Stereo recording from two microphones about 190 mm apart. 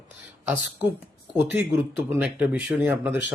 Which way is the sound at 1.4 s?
15° right (ahead or behind).